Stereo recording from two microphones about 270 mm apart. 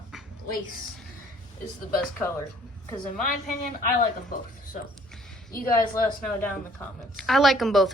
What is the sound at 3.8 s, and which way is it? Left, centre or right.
Speech, left.